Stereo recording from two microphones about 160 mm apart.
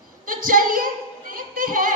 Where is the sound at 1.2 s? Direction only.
60° right (ahead or behind).